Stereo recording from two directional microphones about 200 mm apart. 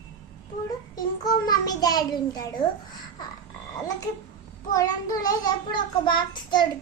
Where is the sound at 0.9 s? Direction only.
20° left (ahead or behind).